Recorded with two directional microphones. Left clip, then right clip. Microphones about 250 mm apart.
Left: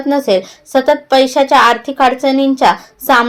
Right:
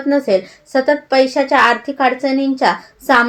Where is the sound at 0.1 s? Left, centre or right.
Left.